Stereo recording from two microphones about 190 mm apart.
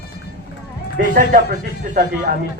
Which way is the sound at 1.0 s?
45° right (ahead or behind).